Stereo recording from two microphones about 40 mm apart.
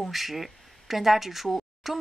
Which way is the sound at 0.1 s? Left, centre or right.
Centre.